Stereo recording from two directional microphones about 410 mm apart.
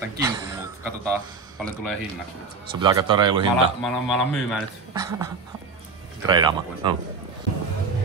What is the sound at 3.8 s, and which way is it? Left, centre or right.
A man's voice, centre.